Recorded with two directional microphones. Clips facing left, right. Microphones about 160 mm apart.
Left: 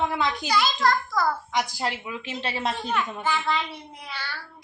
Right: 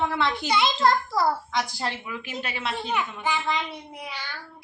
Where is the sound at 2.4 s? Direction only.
35° left (ahead or behind).